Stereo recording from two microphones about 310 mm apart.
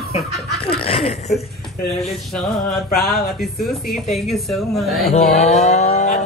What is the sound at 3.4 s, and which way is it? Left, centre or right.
Speech, centre.